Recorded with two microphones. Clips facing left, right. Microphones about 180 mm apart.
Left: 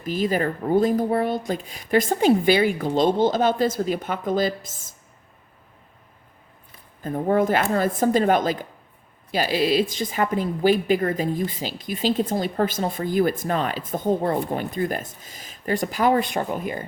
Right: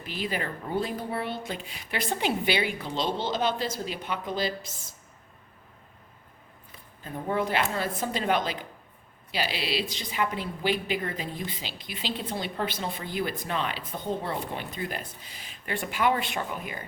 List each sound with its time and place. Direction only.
0.0 s a woman's voice: 45° left (ahead or behind)
7.0 s a woman's voice: 45° left (ahead or behind)